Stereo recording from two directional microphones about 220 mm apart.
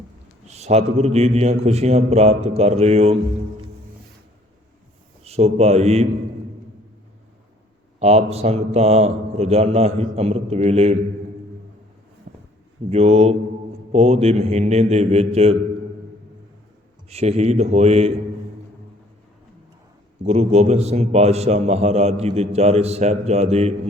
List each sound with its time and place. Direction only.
0.4 s a man's voice: 30° right (ahead or behind)
5.2 s a man's voice: 30° right (ahead or behind)
7.9 s a man's voice: 30° right (ahead or behind)
12.3 s a sound: 40° right (ahead or behind)
12.9 s a man's voice: 30° right (ahead or behind)
17.1 s a man's voice: 30° right (ahead or behind)
20.2 s a man's voice: 30° right (ahead or behind)